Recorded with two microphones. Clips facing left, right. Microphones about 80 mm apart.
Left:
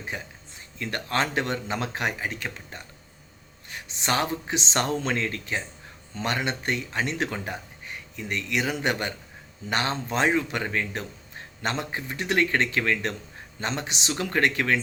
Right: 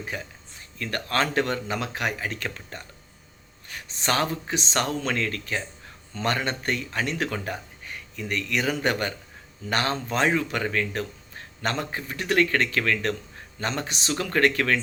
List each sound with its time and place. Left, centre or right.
0.1 s speech: left